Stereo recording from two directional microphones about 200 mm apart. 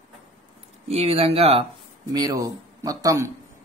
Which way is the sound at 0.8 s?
30° right (ahead or behind).